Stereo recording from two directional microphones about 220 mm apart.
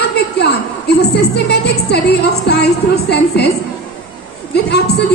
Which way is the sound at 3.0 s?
50° left (ahead or behind).